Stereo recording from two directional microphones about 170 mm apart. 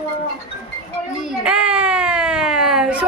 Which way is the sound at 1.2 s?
5° right (ahead or behind).